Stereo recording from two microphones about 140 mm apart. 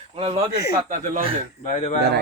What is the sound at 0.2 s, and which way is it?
Speech, 45° right (ahead or behind).